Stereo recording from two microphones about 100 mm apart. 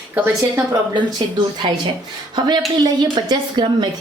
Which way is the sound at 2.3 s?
45° right (ahead or behind).